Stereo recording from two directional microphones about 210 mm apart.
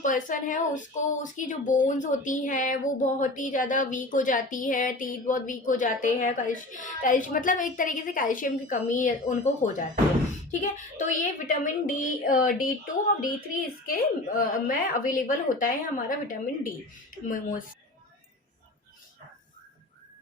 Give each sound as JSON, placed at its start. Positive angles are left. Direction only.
{"t": 0.0, "sound": "speech", "side_deg": 40}
{"t": 10.6, "sound": "speech", "side_deg": 35}